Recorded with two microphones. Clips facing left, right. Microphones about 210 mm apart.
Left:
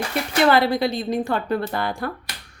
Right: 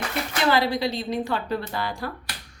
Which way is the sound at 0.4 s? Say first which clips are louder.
Left 4 dB; 55° left (ahead or behind).